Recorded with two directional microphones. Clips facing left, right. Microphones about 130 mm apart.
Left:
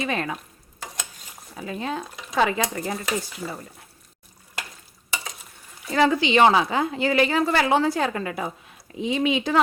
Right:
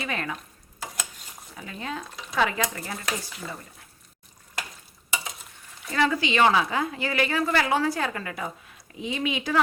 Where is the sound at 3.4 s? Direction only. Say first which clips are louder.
Left 4 dB; 5° left (ahead or behind).